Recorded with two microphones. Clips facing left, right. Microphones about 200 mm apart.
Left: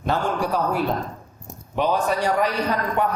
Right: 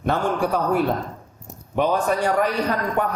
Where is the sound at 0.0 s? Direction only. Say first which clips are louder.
Right 2 dB; 55° right (ahead or behind).